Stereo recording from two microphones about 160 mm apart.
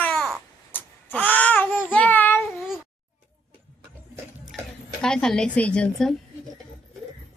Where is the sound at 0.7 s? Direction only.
10° left (ahead or behind).